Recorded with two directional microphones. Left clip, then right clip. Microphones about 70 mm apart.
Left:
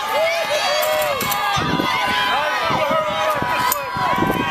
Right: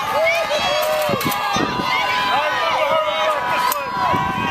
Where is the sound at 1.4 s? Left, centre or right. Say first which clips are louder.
Left 1 dB; left.